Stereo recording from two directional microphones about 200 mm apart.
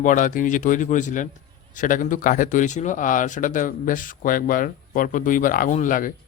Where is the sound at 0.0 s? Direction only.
40° left (ahead or behind).